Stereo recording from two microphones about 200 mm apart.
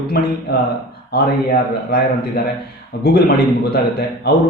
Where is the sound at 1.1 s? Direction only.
50° left (ahead or behind).